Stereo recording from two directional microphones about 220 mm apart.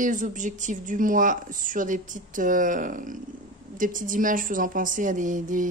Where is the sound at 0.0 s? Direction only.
35° right (ahead or behind).